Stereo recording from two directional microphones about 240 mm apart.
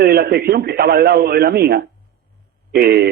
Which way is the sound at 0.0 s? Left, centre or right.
Right.